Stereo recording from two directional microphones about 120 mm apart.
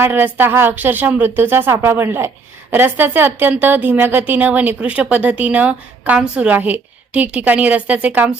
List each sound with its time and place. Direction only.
0.0 s a woman's voice: 15° right (ahead or behind)